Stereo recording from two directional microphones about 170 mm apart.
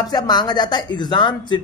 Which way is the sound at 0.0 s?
25° left (ahead or behind).